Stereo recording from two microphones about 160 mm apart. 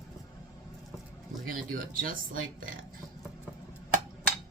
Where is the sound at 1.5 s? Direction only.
60° right (ahead or behind).